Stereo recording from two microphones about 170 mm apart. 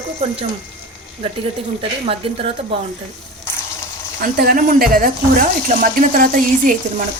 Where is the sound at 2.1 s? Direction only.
35° right (ahead or behind).